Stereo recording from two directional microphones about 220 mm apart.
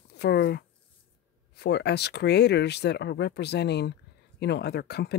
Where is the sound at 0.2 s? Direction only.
45° left (ahead or behind).